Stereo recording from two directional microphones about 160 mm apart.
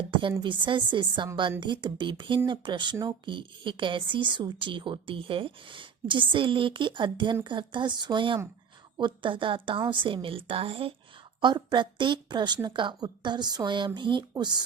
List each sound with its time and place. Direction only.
0.1 s a woman's voice: 30° right (ahead or behind)